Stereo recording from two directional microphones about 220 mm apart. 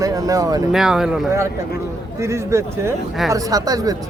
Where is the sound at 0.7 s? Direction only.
Centre (ahead or behind).